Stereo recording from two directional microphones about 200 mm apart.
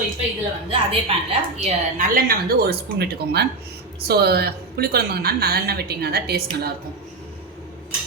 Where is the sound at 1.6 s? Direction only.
40° right (ahead or behind).